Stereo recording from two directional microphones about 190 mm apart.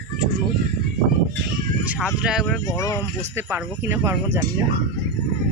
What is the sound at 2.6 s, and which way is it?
Speech, 15° left (ahead or behind).